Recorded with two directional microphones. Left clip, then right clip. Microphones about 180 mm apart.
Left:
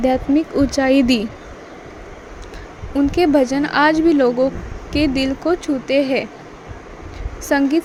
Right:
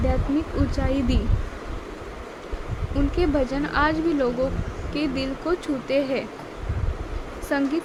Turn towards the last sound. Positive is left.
turn(degrees=30)  # may be behind; listen again after turning